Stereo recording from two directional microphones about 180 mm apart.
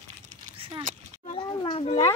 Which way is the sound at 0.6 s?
30° right (ahead or behind).